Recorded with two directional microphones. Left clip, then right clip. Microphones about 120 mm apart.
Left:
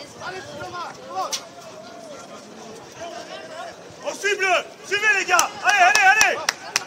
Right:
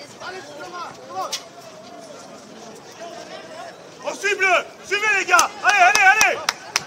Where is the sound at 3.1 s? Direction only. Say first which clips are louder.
Left 1 dB; 25° left (ahead or behind).